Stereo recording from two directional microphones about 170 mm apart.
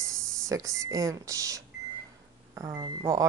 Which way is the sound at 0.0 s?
20° right (ahead or behind).